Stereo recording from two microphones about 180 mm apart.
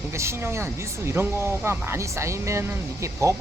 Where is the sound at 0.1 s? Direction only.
15° right (ahead or behind).